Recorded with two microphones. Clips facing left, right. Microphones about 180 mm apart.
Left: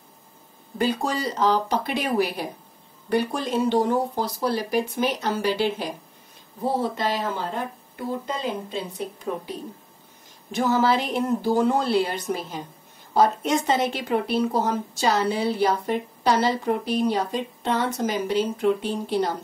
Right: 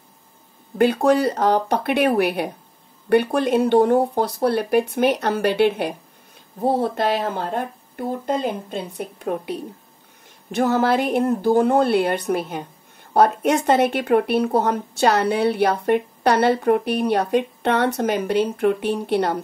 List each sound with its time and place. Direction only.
0.7 s speech: 60° right (ahead or behind)